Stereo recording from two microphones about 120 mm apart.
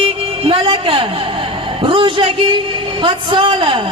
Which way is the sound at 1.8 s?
45° right (ahead or behind).